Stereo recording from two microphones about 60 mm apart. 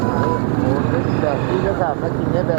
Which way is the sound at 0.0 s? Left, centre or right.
Centre.